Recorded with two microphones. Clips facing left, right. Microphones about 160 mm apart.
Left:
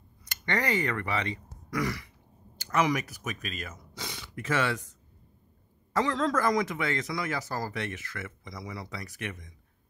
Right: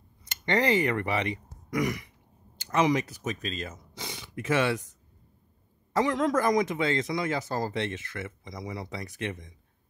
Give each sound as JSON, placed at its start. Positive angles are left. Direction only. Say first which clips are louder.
{"t": 0.2, "sound": "speech", "louder": "right 5 dB", "side_deg": -20}
{"t": 5.9, "sound": "speech", "louder": "right 2 dB", "side_deg": -15}